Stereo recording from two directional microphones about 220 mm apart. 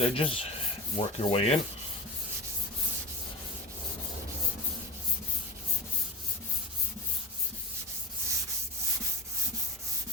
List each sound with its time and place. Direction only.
0.0 s rub: 25° left (ahead or behind)